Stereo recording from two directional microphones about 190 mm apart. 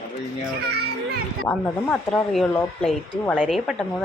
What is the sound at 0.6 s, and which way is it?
Speech, 55° right (ahead or behind).